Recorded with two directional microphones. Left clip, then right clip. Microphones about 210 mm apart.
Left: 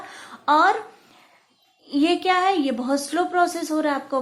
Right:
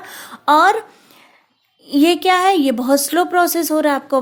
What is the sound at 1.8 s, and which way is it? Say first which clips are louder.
A woman's voice: right 6 dB; 45° right (ahead or behind).